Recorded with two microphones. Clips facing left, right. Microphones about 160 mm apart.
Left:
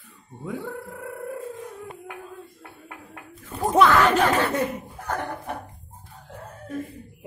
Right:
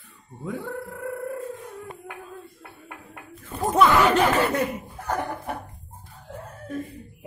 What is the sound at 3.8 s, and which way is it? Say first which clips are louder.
Chatter: right 1 dB; 15° right (ahead or behind).